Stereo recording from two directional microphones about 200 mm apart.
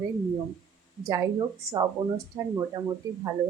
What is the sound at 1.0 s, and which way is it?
Speech, 20° right (ahead or behind).